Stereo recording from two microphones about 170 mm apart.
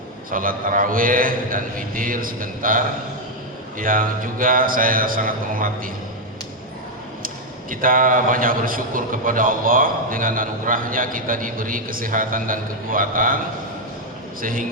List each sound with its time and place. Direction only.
0.3 s a man's voice: 55° right (ahead or behind)
7.7 s a man's voice: 55° right (ahead or behind)
14.4 s a man's voice: 55° right (ahead or behind)